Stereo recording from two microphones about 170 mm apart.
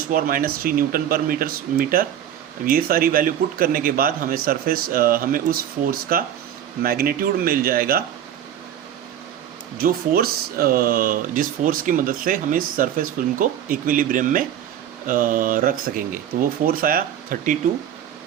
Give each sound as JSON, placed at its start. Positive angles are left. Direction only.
{"t": 0.1, "sound": "speech", "side_deg": -55}
{"t": 9.7, "sound": "speech", "side_deg": -60}